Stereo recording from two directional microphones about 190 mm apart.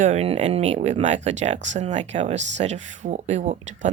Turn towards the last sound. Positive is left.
turn(degrees=-40)  # may be behind; listen again after turning